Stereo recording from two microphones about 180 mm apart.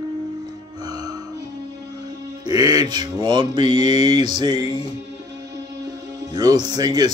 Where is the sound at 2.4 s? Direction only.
20° right (ahead or behind).